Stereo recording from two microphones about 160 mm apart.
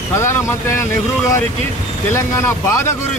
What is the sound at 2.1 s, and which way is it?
Speech, 15° left (ahead or behind).